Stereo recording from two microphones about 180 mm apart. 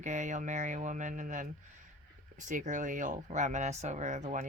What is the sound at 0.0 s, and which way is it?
Speech, 45° right (ahead or behind).